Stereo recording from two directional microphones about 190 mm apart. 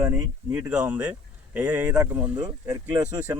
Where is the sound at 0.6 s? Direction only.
5° right (ahead or behind).